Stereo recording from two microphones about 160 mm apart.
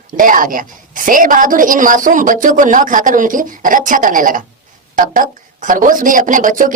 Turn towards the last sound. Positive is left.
turn(degrees=-55)  # may be behind; listen again after turning